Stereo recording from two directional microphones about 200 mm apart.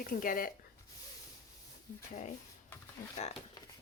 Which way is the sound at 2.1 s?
40° left (ahead or behind).